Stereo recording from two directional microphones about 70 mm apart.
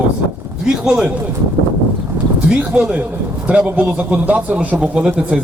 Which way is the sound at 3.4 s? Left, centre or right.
Centre.